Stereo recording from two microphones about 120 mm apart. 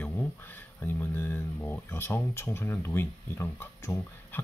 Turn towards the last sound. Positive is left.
turn(degrees=20)  # may be behind; listen again after turning